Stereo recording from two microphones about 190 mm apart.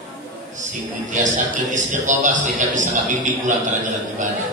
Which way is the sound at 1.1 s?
40° right (ahead or behind).